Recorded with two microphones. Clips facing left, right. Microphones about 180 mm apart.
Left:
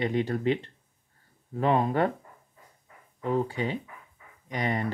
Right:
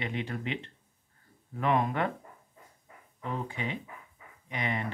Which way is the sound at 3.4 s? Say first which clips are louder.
Left 5 dB; 35° left (ahead or behind).